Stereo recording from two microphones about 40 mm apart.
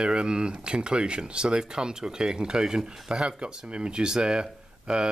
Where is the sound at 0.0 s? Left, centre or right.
Right.